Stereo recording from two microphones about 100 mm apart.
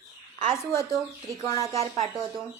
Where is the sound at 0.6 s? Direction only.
25° left (ahead or behind).